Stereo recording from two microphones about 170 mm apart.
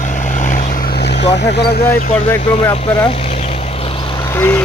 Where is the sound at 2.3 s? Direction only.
20° left (ahead or behind).